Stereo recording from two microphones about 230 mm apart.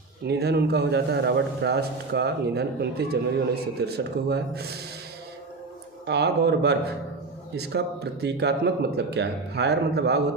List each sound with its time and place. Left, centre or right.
0.3 s a man's voice: right
6.1 s a man's voice: right